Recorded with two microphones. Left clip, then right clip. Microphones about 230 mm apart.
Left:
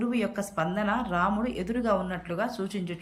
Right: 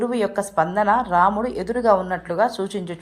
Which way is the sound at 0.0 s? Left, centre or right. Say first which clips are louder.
Right 8 dB; centre.